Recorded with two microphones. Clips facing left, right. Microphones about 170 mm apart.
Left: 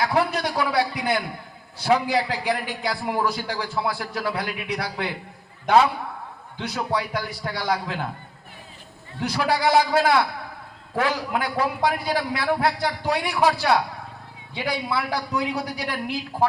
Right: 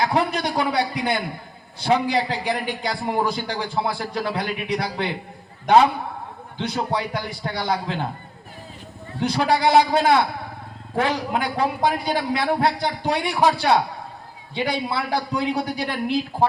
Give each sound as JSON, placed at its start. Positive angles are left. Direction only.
{"t": 0.0, "sound": "a man's voice", "side_deg": -25}
{"t": 6.6, "sound": "a man's voice", "side_deg": -25}
{"t": 9.2, "sound": "a man's voice", "side_deg": -25}